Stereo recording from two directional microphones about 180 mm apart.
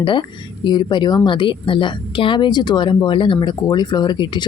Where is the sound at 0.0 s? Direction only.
25° left (ahead or behind).